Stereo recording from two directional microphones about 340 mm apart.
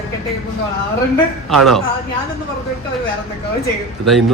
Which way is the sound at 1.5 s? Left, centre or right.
Centre.